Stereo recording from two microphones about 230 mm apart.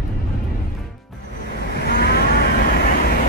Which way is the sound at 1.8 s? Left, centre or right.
Left.